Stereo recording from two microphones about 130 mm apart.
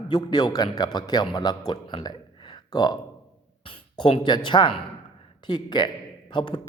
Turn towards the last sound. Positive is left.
turn(degrees=35)  # may be behind; listen again after turning